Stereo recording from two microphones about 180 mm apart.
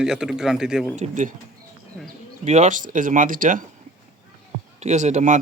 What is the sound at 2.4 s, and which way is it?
Speech, 40° right (ahead or behind).